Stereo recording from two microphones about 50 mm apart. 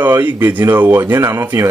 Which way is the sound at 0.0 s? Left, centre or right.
Right.